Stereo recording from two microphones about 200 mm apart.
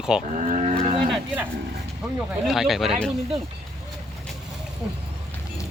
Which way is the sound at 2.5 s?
Centre (ahead or behind).